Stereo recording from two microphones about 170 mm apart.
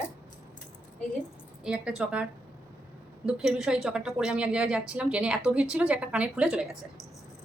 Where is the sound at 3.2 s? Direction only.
5° right (ahead or behind).